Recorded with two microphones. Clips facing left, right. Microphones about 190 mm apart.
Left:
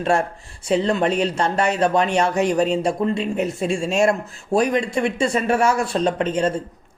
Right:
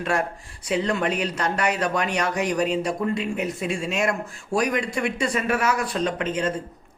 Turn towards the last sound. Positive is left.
turn(degrees=30)  # may be behind; listen again after turning